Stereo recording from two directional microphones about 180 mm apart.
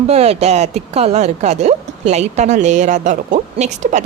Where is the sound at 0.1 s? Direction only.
35° right (ahead or behind).